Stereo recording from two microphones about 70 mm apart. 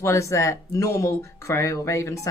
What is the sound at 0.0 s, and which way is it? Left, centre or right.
Speech, left.